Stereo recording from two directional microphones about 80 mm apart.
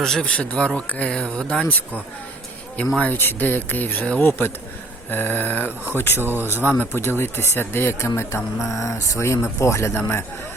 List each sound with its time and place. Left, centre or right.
0.0 s speech: centre; by 6.2 s left
6.2 s speech: right
6.6 s speech: left